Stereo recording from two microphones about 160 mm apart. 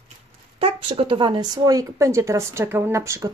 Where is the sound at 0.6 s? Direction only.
35° right (ahead or behind).